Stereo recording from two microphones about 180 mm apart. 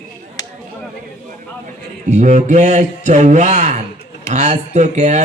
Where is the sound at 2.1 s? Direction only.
45° right (ahead or behind).